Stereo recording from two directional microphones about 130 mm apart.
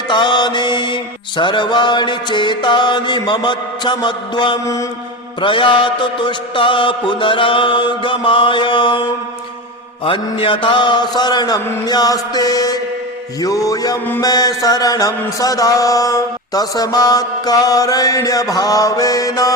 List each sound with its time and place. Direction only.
0.1 s music: 35° left (ahead or behind)
1.4 s mantra: 35° left (ahead or behind)
4.6 s mantra: 25° left (ahead or behind)
5.4 s mantra: 40° left (ahead or behind)